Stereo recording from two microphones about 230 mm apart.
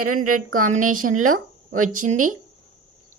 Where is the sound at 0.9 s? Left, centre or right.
Right.